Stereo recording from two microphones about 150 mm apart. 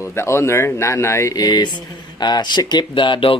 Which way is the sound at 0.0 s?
20° left (ahead or behind).